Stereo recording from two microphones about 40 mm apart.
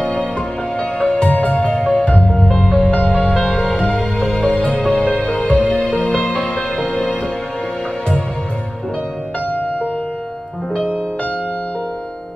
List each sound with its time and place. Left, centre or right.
0.7 s music: left
1.8 s music: left
2.9 s music: left
9.5 s music: left
10.7 s music: left